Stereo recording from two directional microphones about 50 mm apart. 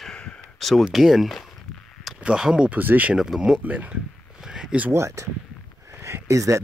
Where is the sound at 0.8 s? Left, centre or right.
Centre.